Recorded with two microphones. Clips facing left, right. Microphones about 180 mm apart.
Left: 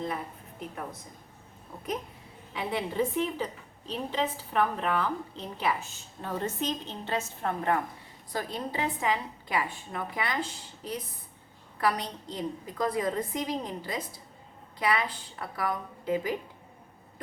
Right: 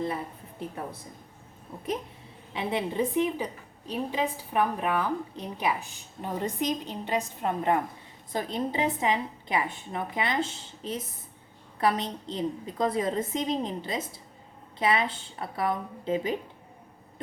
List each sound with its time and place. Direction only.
2.5 s a woman's voice: 25° right (ahead or behind)